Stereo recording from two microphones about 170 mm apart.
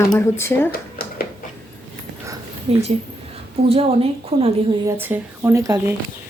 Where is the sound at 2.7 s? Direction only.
35° right (ahead or behind).